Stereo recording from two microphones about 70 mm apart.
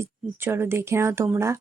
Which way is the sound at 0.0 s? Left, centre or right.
Right.